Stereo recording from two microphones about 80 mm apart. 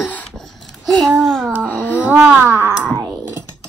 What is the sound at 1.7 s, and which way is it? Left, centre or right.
Babbling, centre.